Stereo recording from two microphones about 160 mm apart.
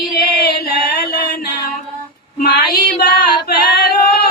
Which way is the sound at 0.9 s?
65° left (ahead or behind).